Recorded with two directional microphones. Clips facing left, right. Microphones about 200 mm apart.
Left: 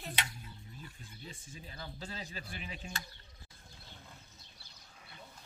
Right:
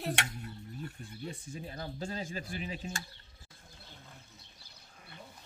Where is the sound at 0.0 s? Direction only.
70° right (ahead or behind); by 3.0 s 40° right (ahead or behind).